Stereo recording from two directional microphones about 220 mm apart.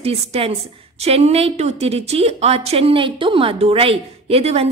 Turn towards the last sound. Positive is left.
turn(degrees=-25)  # may be behind; listen again after turning